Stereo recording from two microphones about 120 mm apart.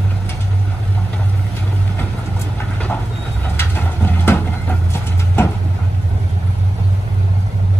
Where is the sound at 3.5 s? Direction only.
20° left (ahead or behind).